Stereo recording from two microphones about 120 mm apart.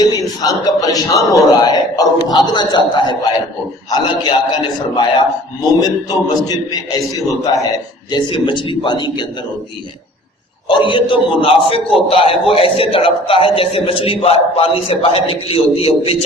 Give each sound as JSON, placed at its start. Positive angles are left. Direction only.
{"t": 0.0, "sound": "a man's voice", "side_deg": 35}
{"t": 8.3, "sound": "a man's voice", "side_deg": 45}
{"t": 10.7, "sound": "a man's voice", "side_deg": 45}